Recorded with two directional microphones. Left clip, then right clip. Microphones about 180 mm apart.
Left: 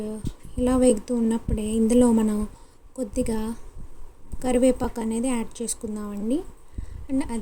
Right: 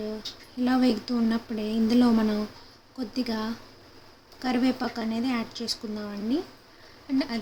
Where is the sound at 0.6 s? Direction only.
30° left (ahead or behind).